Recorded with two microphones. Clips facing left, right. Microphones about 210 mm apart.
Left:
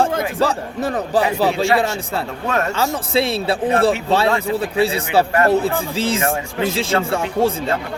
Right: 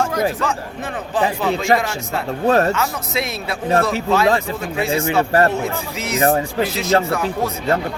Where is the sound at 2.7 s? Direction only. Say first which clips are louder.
Left 4 dB; 30° left (ahead or behind).